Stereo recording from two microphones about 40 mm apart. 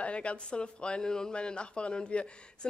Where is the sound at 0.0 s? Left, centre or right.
Left.